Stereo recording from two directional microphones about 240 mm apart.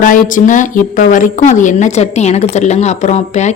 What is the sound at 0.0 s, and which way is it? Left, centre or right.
A woman's voice, left.